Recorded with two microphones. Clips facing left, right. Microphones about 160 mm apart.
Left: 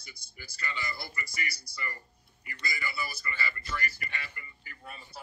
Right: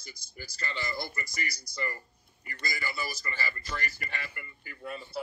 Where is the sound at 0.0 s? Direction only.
45° right (ahead or behind).